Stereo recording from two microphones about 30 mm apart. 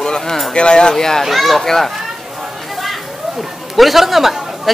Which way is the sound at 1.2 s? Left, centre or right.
Centre.